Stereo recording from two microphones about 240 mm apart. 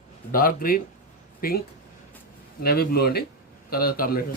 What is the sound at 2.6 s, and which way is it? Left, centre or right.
A man's voice, left.